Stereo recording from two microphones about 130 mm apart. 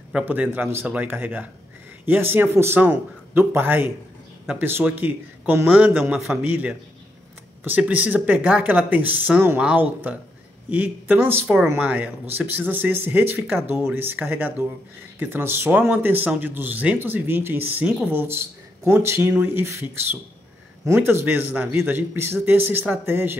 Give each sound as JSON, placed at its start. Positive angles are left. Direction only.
{"t": 0.1, "sound": "speech", "side_deg": -15}
{"t": 6.1, "sound": "a man's voice", "side_deg": -5}
{"t": 6.4, "sound": "speech", "side_deg": -15}
{"t": 11.4, "sound": "speech", "side_deg": -5}